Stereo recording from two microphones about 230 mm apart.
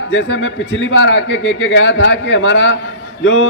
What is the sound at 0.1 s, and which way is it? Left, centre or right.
A man's voice, left.